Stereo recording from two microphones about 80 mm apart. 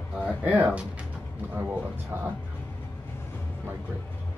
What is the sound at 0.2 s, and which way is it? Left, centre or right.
Speech, centre.